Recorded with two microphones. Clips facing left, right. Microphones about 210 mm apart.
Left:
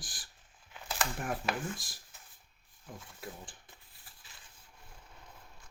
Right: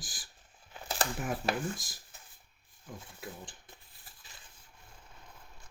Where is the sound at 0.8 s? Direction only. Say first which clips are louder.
Right 2 dB; 35° right (ahead or behind).